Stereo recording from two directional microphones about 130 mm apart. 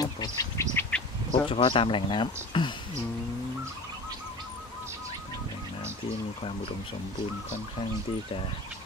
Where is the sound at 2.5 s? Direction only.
40° left (ahead or behind).